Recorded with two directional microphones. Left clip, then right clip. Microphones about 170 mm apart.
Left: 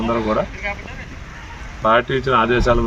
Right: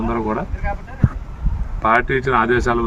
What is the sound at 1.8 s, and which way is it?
Speech, 30° right (ahead or behind).